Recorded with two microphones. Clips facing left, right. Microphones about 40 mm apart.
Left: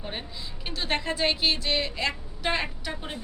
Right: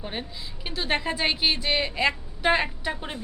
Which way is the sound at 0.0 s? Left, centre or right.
Centre.